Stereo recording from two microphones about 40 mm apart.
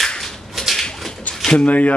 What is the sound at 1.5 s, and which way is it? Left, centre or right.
Speech, left.